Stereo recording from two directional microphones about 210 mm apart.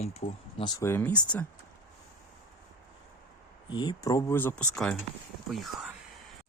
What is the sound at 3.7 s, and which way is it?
Speech, 20° left (ahead or behind).